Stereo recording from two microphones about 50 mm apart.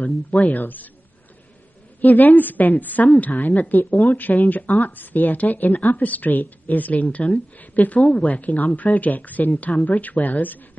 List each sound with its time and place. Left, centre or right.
0.0 s speech: left
2.0 s speech: left